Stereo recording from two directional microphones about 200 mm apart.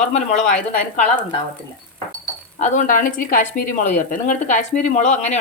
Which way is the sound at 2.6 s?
40° left (ahead or behind).